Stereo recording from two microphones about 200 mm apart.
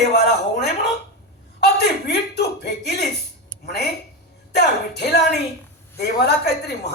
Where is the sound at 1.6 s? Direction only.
55° left (ahead or behind).